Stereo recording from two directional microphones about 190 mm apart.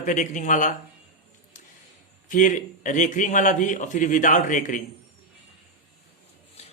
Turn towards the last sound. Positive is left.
turn(degrees=35)  # may be behind; listen again after turning